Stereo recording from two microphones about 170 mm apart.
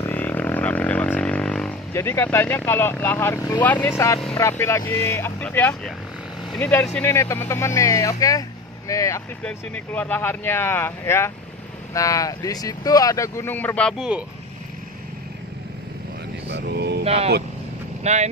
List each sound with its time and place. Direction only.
0.0 s didgeridoo: 10° left (ahead or behind)
2.0 s speech: 15° left (ahead or behind)
3.6 s speech: 10° left (ahead or behind)
9.4 s speech: 10° left (ahead or behind)
16.4 s mantra: 80° right
17.0 s speech: 35° right (ahead or behind)